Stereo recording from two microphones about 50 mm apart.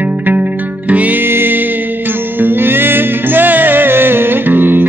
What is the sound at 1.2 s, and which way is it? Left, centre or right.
Music, right.